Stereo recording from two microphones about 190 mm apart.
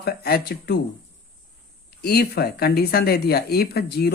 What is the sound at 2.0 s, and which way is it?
Speech, 55° left (ahead or behind).